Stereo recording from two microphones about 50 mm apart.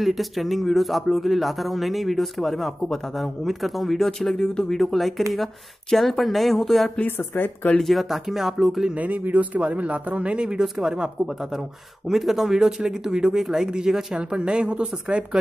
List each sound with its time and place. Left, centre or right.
0.0 s speech: centre
7.1 s speech: left
7.8 s speech: centre
8.9 s speech: right; by 11.1 s centre
12.1 s speech: centre; by 15.2 s right